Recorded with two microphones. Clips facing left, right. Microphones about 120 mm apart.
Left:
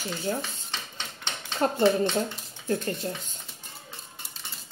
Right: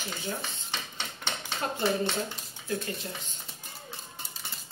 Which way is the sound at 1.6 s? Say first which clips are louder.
Left 7 dB; 45° left (ahead or behind).